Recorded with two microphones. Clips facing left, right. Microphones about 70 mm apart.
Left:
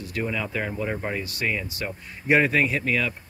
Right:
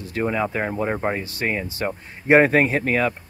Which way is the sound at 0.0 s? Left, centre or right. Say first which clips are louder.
Right 6 dB; right.